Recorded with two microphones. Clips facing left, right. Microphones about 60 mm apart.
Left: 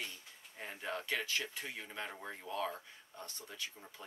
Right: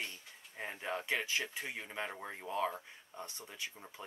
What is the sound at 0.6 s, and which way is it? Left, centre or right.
Speech, right.